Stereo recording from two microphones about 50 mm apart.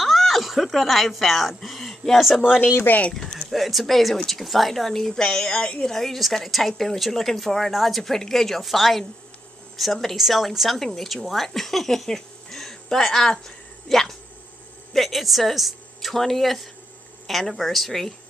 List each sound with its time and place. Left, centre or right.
0.0 s speech: centre
3.1 s speech: centre
3.4 s a woman's voice: centre